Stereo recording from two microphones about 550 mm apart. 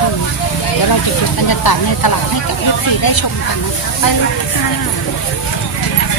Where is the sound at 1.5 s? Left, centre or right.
Left.